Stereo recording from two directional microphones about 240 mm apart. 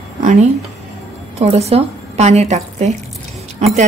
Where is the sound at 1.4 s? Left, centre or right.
Right.